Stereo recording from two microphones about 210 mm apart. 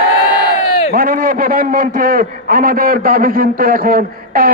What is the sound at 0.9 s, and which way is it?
A man's voice, 45° right (ahead or behind).